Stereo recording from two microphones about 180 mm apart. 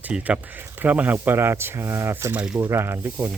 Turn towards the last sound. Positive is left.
turn(degrees=-15)  # may be behind; listen again after turning